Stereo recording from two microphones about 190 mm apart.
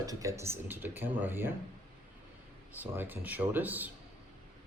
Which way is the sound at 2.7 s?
10° right (ahead or behind).